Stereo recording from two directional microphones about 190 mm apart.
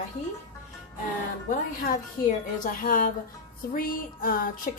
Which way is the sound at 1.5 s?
45° left (ahead or behind).